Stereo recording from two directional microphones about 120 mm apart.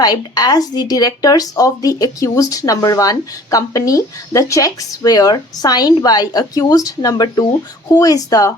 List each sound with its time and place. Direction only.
0.0 s a woman's voice: 35° left (ahead or behind)